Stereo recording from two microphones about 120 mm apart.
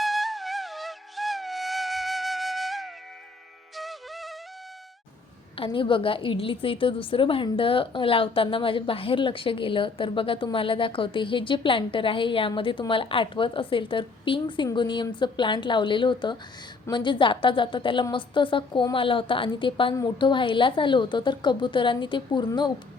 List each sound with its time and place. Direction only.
0.0 s music: centre (ahead or behind)
5.5 s a woman's voice: 45° left (ahead or behind)